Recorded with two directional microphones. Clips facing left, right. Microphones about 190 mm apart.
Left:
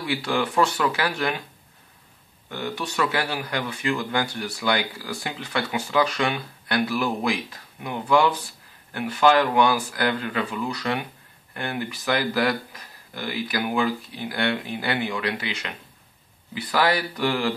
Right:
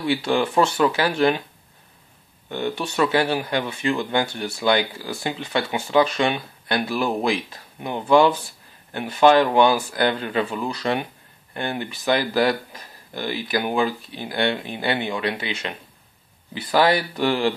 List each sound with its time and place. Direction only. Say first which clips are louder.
0.1 s speech: right 3 dB; 25° right (ahead or behind)
2.5 s speech: right 4 dB; 25° right (ahead or behind)